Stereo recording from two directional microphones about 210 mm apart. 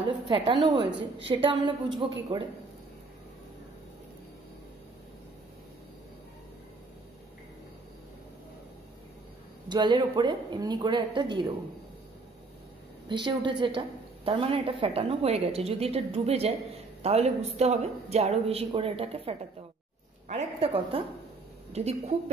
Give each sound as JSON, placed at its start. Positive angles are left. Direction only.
{"t": 0.3, "sound": "a woman's voice", "side_deg": -20}
{"t": 9.7, "sound": "a woman's voice", "side_deg": -20}
{"t": 13.1, "sound": "a woman's voice", "side_deg": -20}